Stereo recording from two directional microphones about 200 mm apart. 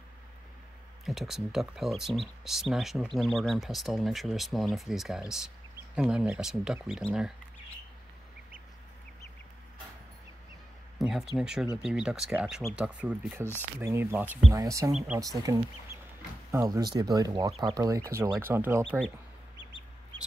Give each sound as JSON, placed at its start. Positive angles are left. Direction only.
{"t": 1.0, "sound": "speech", "side_deg": 0}
{"t": 11.0, "sound": "speech", "side_deg": 0}
{"t": 14.9, "sound": "speech", "side_deg": -5}
{"t": 15.1, "sound": "speech", "side_deg": -15}